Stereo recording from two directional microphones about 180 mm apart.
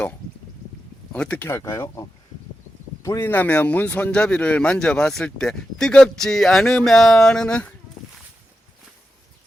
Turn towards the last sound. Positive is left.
turn(degrees=5)  # may be behind; listen again after turning